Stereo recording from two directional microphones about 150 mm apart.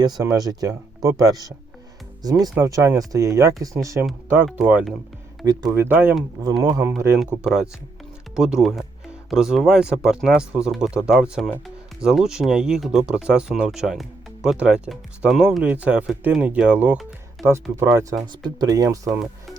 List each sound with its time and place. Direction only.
0.0 s speech: 25° right (ahead or behind)
4.4 s speech: 5° right (ahead or behind)
6.4 s speech: 25° right (ahead or behind)
7.4 s speech: 5° right (ahead or behind); by 19.2 s 20° right (ahead or behind)